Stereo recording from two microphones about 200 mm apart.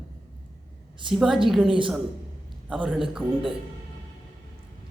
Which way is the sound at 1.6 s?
25° right (ahead or behind).